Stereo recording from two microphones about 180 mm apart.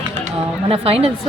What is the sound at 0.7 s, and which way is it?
Speech, 30° right (ahead or behind).